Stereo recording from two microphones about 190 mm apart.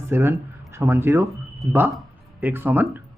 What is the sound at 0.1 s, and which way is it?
Speech, 10° right (ahead or behind).